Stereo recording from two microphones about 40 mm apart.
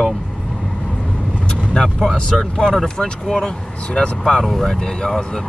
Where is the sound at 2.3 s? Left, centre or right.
Centre.